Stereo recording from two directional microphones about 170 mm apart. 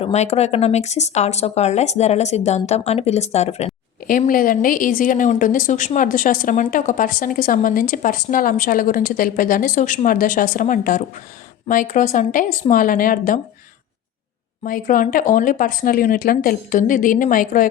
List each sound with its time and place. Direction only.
0.0 s speech: 40° left (ahead or behind)
4.3 s a woman's voice: 55° left (ahead or behind)
14.6 s a woman's voice: 50° left (ahead or behind)